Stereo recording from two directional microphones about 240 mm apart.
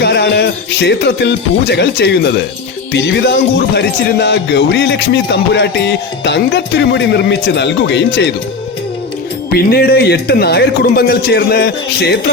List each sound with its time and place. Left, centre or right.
0.0 s speech: left
2.9 s music: left
9.5 s a man's voice: left